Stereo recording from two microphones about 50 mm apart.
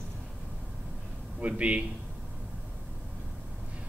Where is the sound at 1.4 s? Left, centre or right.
Right.